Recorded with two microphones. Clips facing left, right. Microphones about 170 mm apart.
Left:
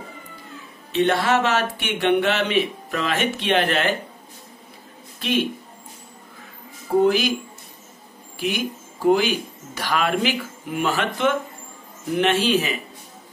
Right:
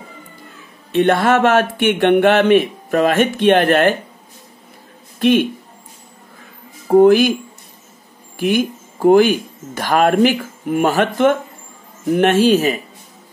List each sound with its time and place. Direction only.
0.9 s speech: 50° right (ahead or behind)
5.2 s speech: 55° right (ahead or behind)
7.0 s speech: 50° right (ahead or behind)
8.4 s speech: 50° right (ahead or behind)